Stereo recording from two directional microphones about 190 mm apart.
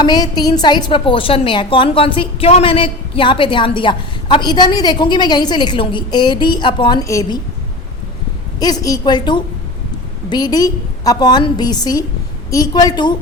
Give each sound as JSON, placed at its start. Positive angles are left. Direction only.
{"t": 0.0, "sound": "a woman's voice", "side_deg": 20}
{"t": 8.5, "sound": "a woman's voice", "side_deg": 20}